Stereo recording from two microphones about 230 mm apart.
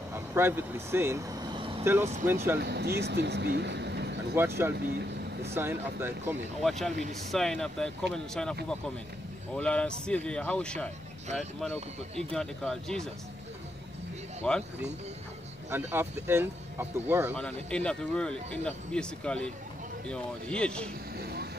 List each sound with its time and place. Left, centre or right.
0.1 s vehicle: centre
2.2 s speech: centre
2.6 s speech: right
4.4 s speech: centre
4.8 s speech: right
5.5 s speech: centre
6.6 s speech: centre
12.2 s speech: centre
14.4 s speech: centre
15.7 s speech: centre
17.4 s speech: centre
21.2 s vehicle: right